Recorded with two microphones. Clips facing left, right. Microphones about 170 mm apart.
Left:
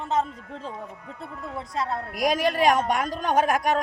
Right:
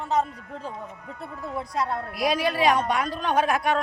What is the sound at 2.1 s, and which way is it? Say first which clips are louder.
A woman's voice: left 2 dB; 45° left (ahead or behind).